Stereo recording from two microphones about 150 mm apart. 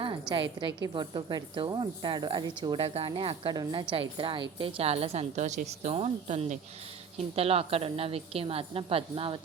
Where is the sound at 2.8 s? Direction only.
40° right (ahead or behind).